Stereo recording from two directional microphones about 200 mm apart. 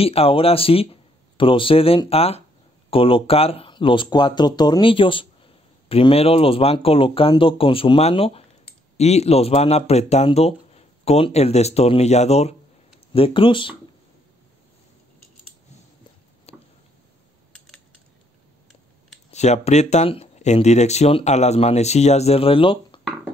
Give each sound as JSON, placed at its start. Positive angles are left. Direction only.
{"t": 0.0, "sound": "speech", "side_deg": 30}
{"t": 16.5, "sound": "a sound", "side_deg": 30}
{"t": 19.3, "sound": "speech", "side_deg": 35}